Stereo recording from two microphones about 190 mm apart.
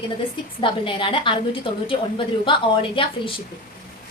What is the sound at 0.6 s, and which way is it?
Speech, 25° left (ahead or behind).